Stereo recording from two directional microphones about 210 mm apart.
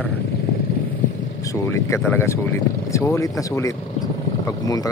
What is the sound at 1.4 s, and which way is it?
Speech, 15° left (ahead or behind).